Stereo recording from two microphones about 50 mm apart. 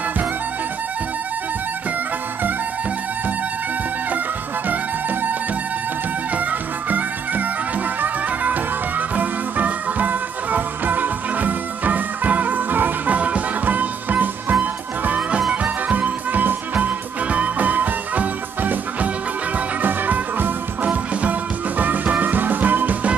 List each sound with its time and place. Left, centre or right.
6.9 s music: right